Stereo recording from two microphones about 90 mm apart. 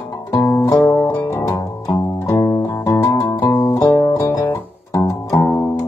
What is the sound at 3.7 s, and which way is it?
Music, 40° left (ahead or behind).